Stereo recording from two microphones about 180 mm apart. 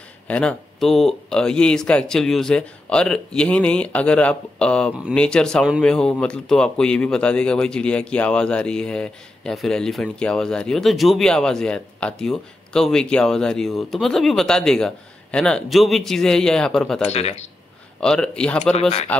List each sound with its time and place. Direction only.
0.3 s speech: 5° left (ahead or behind)
17.1 s speech: 40° left (ahead or behind)
18.0 s speech: 5° left (ahead or behind)
18.7 s speech: 35° left (ahead or behind)